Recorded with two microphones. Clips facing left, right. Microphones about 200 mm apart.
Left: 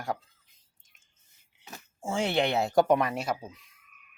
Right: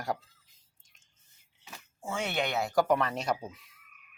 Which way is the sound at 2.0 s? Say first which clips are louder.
Left 5 dB; 30° left (ahead or behind).